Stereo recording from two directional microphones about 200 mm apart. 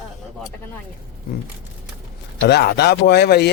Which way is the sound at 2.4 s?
55° left (ahead or behind).